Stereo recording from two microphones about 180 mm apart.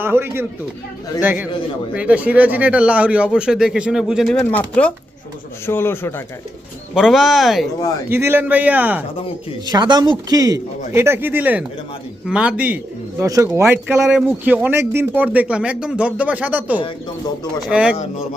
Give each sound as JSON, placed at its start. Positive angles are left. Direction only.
{"t": 0.0, "sound": "a man's voice", "side_deg": -10}
{"t": 6.9, "sound": "speech", "side_deg": 0}
{"t": 8.1, "sound": "speech", "side_deg": -10}
{"t": 9.6, "sound": "speech", "side_deg": -25}
{"t": 13.2, "sound": "speech", "side_deg": -20}
{"t": 17.9, "sound": "speech", "side_deg": 35}